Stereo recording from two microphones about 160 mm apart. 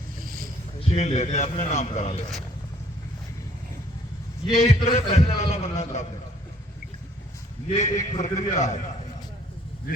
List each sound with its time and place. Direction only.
0.2 s a sound: 65° right (ahead or behind)
0.8 s a man's voice: 40° left (ahead or behind)
4.4 s a man's voice: 40° left (ahead or behind)
7.7 s a man's voice: 50° left (ahead or behind)